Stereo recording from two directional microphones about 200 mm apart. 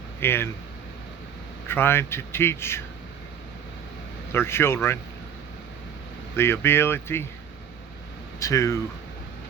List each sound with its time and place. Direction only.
0.2 s a man's voice: 10° left (ahead or behind)
1.6 s a man's voice: 10° left (ahead or behind)
4.3 s a man's voice: 10° left (ahead or behind)
6.3 s a man's voice: 10° left (ahead or behind)
8.4 s a man's voice: 15° left (ahead or behind)